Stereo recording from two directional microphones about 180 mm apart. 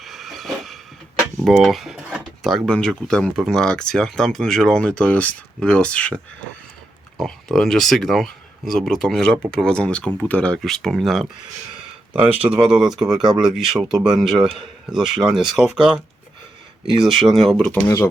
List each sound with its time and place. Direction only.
0.0 s a sound: centre (ahead or behind)
1.5 s speech: centre (ahead or behind)
7.2 s speech: centre (ahead or behind)
17.0 s speech: centre (ahead or behind)
17.8 s speech: 20° left (ahead or behind)